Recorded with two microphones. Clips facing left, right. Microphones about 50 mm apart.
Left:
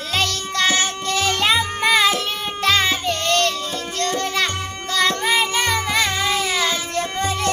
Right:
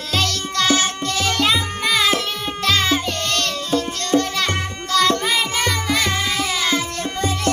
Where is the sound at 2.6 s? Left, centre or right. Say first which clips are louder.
Even; centre.